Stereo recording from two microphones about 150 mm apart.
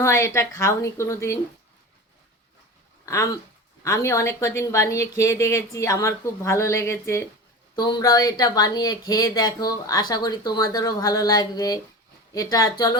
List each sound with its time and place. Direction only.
0.0 s speech: 20° left (ahead or behind)
3.8 s speech: 20° left (ahead or behind)